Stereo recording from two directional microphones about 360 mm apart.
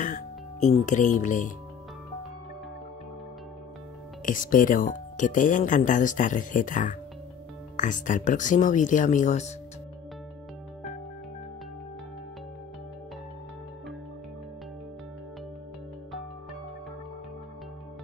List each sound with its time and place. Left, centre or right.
0.0 s speech: left
4.3 s speech: left